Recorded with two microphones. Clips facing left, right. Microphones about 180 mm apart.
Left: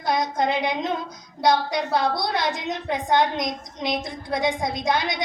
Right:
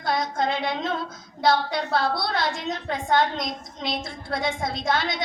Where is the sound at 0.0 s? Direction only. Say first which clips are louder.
Left 2 dB; 20° left (ahead or behind).